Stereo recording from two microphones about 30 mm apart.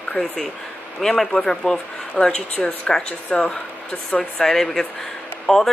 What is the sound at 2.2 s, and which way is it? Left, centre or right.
Speech, left.